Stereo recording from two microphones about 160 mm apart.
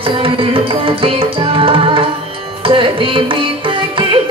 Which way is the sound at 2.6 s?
35° right (ahead or behind).